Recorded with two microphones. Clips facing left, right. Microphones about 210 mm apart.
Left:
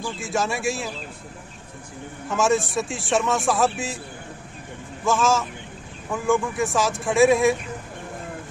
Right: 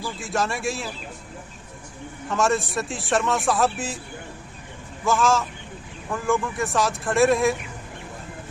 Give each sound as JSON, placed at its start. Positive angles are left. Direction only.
{"t": 0.2, "sound": "a man's voice", "side_deg": 0}
{"t": 2.2, "sound": "a man's voice", "side_deg": 0}
{"t": 5.0, "sound": "a man's voice", "side_deg": 0}